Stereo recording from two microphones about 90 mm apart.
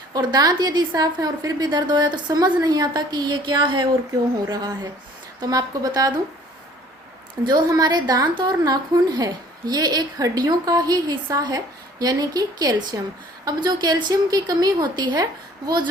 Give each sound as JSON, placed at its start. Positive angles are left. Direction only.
{"t": 0.1, "sound": "a woman's voice", "side_deg": -50}
{"t": 4.4, "sound": "a woman's voice", "side_deg": -50}
{"t": 7.4, "sound": "a woman's voice", "side_deg": -35}
{"t": 7.7, "sound": "a woman's voice", "side_deg": -50}